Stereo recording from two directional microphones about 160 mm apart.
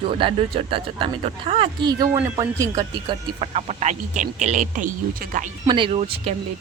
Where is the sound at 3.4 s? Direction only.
40° right (ahead or behind).